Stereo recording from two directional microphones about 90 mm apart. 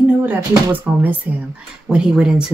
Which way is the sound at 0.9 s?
20° right (ahead or behind).